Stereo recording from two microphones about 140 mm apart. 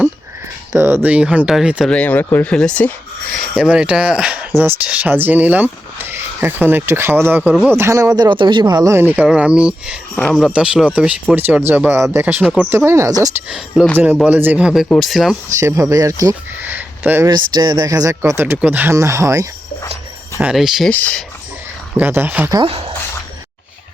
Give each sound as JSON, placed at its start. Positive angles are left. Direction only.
{"t": 0.7, "sound": "speech", "side_deg": -20}
{"t": 2.0, "sound": "speech", "side_deg": 15}
{"t": 3.3, "sound": "speech", "side_deg": 0}
{"t": 13.7, "sound": "speech", "side_deg": -5}
{"t": 15.5, "sound": "speech", "side_deg": -20}
{"t": 17.2, "sound": "speech", "side_deg": -30}
{"t": 20.4, "sound": "speech", "side_deg": -5}
{"t": 20.9, "sound": "speech", "side_deg": 10}
{"t": 21.9, "sound": "speech", "side_deg": -15}
{"t": 22.6, "sound": "speech", "side_deg": -45}